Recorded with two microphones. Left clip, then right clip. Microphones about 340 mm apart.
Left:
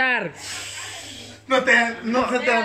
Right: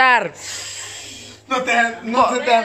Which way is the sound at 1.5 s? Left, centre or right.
Centre.